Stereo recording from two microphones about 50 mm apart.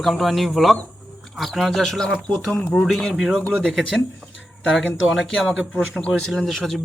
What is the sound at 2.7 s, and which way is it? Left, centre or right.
Speech, centre.